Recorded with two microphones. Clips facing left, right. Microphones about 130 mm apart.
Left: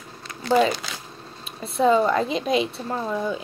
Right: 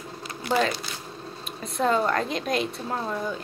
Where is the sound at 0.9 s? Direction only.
90° left.